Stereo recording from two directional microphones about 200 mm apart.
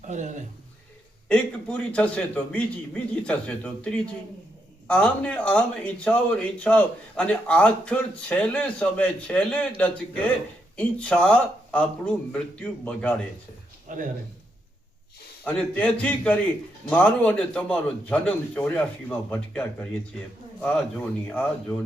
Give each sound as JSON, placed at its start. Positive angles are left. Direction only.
{"t": 0.0, "sound": "a man's voice", "side_deg": -40}
{"t": 1.3, "sound": "a man's voice", "side_deg": 5}
{"t": 13.9, "sound": "speech", "side_deg": -40}
{"t": 15.4, "sound": "a man's voice", "side_deg": 5}